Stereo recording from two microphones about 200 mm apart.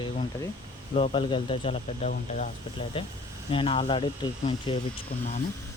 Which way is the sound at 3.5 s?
25° left (ahead or behind).